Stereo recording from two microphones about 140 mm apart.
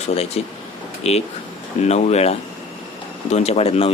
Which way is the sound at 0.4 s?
50° left (ahead or behind).